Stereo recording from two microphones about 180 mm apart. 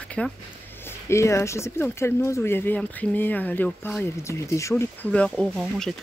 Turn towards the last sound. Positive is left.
turn(degrees=5)  # may be behind; listen again after turning